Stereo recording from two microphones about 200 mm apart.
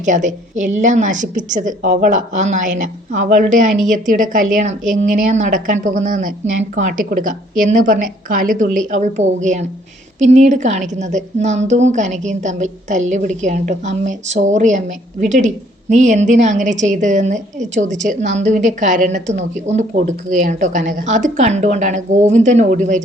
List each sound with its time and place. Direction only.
0.0 s a woman's voice: 40° right (ahead or behind)